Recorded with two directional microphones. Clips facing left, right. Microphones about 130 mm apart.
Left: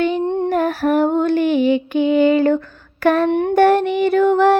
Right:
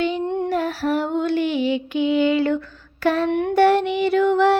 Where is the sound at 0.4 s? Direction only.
50° left (ahead or behind).